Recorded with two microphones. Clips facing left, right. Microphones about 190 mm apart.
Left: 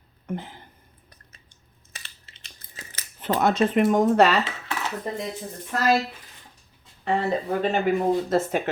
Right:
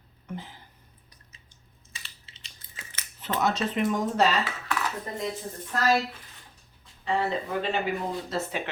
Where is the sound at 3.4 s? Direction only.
55° left (ahead or behind).